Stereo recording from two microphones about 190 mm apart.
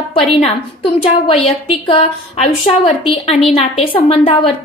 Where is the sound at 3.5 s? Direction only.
30° left (ahead or behind).